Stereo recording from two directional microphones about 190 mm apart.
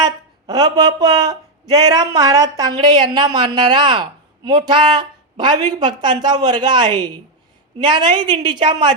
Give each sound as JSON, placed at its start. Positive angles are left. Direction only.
{"t": 0.0, "sound": "speech", "side_deg": -20}